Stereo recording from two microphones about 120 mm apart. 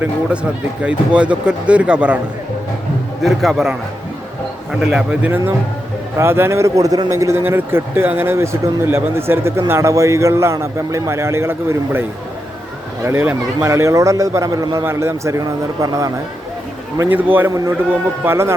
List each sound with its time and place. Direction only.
0.8 s speech: 10° right (ahead or behind)
3.2 s a man's voice: 5° right (ahead or behind)
6.1 s a man's voice: 20° right (ahead or behind)
13.1 s a man's voice: 20° right (ahead or behind)
17.0 s a man's voice: 15° right (ahead or behind)